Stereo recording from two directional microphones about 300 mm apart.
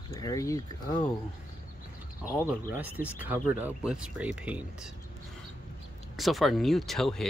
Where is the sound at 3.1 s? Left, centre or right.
Centre.